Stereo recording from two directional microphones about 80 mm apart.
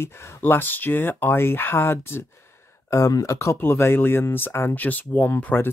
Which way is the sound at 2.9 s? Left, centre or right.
Left.